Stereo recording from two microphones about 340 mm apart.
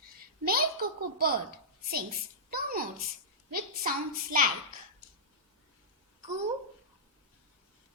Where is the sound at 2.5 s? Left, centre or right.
Right.